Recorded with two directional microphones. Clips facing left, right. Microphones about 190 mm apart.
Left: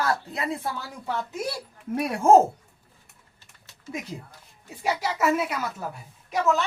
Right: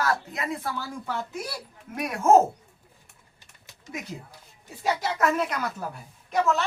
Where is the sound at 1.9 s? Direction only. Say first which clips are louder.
Left 2 dB; 30° left (ahead or behind).